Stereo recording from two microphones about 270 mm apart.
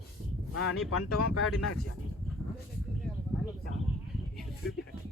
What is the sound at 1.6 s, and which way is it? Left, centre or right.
Speech, left.